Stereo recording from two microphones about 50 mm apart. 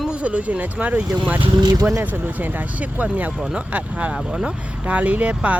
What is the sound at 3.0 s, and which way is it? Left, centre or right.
Speech, right.